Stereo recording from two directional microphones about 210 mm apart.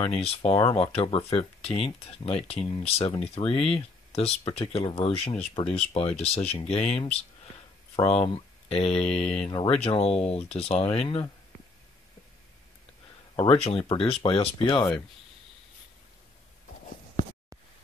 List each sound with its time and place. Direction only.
0.0 s speech: 30° left (ahead or behind)
13.4 s speech: 25° left (ahead or behind)